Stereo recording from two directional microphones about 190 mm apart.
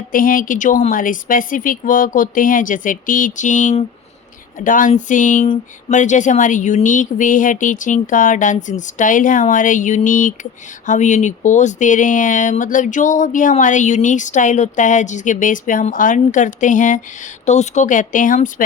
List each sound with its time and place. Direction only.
0.1 s speech: 45° left (ahead or behind)